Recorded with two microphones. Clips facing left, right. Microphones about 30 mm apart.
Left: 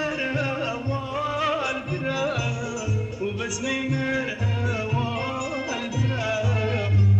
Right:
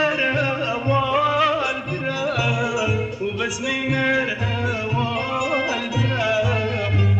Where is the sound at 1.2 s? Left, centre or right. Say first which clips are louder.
Right 3 dB; right.